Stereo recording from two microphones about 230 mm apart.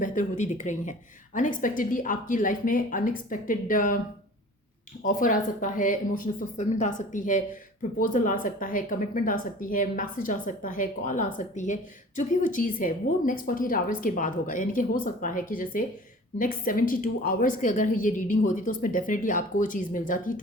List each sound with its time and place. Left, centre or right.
0.0 s speech: left
5.0 s speech: left